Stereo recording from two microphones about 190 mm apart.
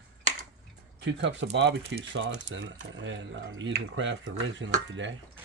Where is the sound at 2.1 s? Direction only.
80° right.